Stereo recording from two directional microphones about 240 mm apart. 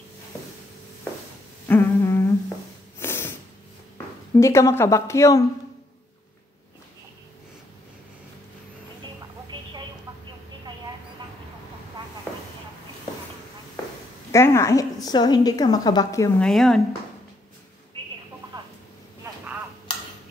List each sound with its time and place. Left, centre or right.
1.7 s humming: centre
3.0 s a sound: centre
4.4 s a woman's voice: centre
14.3 s a woman's voice: centre
16.4 s speech: centre